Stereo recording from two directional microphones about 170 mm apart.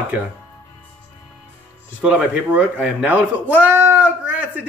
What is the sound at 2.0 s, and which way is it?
Speech, 5° right (ahead or behind).